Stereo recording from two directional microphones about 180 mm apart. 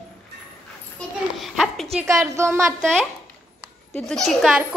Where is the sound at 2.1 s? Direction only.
15° right (ahead or behind).